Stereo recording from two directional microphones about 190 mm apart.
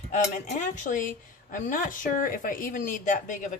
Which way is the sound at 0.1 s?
40° left (ahead or behind).